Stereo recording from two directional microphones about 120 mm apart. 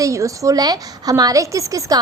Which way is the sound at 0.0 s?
25° right (ahead or behind).